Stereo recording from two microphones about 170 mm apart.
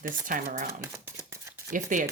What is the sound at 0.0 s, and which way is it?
Speech, 55° right (ahead or behind).